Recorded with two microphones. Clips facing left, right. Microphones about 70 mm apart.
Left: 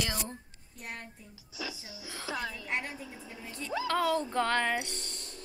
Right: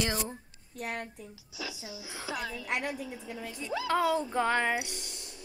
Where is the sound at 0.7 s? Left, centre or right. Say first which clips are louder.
Right 7 dB; right.